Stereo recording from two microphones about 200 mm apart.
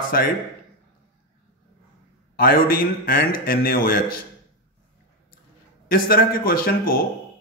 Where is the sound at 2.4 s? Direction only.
45° left (ahead or behind).